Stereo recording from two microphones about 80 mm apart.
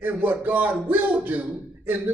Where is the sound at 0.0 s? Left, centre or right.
Right.